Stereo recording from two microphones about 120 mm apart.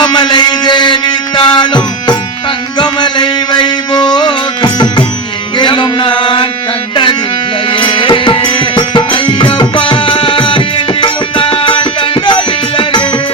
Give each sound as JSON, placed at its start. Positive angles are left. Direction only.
{"t": 0.0, "sound": "music", "side_deg": 40}